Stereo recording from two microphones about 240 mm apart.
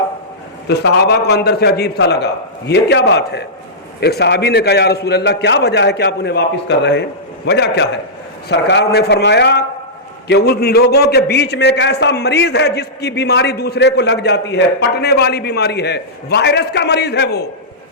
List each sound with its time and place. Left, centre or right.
0.7 s a man's voice: left